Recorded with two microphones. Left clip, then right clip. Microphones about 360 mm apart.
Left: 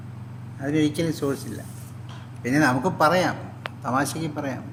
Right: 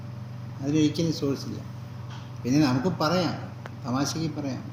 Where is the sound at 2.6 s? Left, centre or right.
Left.